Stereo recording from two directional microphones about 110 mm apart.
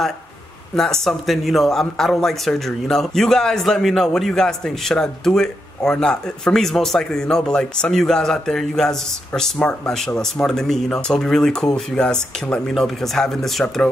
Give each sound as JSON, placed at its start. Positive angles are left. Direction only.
{"t": 0.7, "sound": "speech", "side_deg": 5}